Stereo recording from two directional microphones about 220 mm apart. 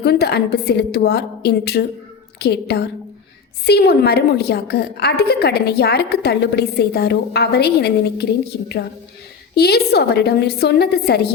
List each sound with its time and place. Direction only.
0.0 s a woman's voice: 45° left (ahead or behind)
9.6 s a woman's voice: 45° left (ahead or behind)